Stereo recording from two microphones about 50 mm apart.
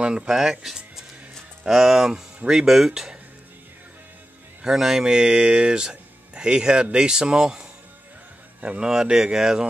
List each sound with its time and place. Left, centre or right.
0.0 s speech: centre
4.6 s speech: centre
8.6 s speech: centre